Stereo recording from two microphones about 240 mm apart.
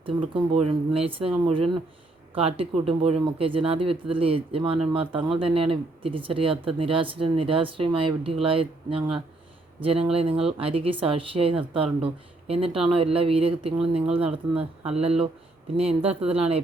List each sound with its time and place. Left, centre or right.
0.0 s speech: right